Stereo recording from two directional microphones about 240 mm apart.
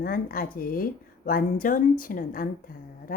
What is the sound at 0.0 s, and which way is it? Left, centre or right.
Speech, left.